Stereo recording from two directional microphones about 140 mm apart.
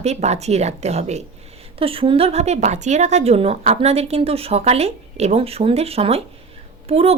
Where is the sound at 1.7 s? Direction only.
40° right (ahead or behind).